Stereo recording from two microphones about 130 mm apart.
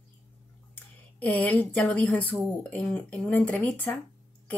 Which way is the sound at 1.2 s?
10° left (ahead or behind).